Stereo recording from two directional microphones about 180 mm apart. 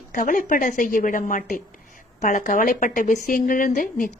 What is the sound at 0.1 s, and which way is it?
A woman's voice, 45° left (ahead or behind).